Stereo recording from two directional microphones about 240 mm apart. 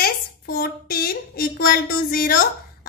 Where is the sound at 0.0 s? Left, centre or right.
Left.